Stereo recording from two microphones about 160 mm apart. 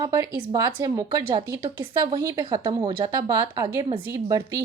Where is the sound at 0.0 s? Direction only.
25° right (ahead or behind).